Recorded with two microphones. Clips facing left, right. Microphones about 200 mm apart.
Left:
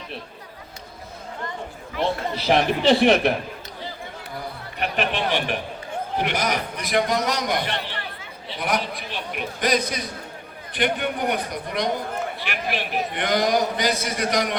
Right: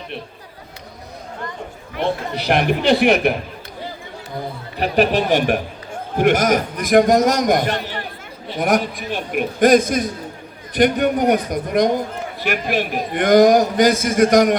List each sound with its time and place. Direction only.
2.5 s speech: centre (ahead or behind)
4.8 s a man's voice: 40° right (ahead or behind)